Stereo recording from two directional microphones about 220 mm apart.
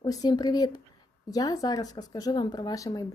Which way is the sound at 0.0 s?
15° left (ahead or behind).